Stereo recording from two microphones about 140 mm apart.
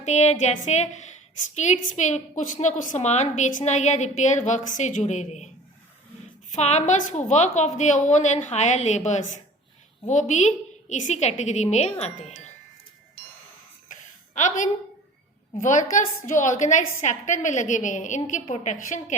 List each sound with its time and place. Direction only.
0.0 s a woman's voice: 55° left (ahead or behind)
6.6 s a woman's voice: 55° left (ahead or behind)
14.3 s a woman's voice: 60° left (ahead or behind)